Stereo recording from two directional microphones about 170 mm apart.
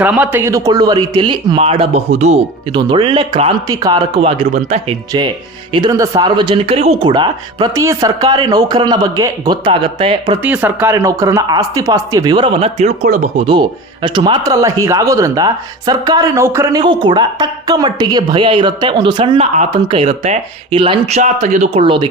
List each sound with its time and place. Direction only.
0.0 s a woman's voice: 10° right (ahead or behind); by 2.4 s 45° right (ahead or behind)
2.7 s a woman's voice: 30° right (ahead or behind)
5.7 s a woman's voice: 20° right (ahead or behind)
7.1 s a woman's voice: 25° right (ahead or behind)
10.4 s a woman's voice: 10° right (ahead or behind); by 13.4 s 45° right (ahead or behind)
13.4 s a woman's voice: 25° right (ahead or behind)
16.8 s a woman's voice: 25° right (ahead or behind)
21.2 s speech: 45° right (ahead or behind)